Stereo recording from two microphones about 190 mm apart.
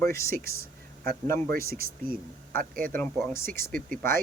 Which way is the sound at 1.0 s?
50° right (ahead or behind).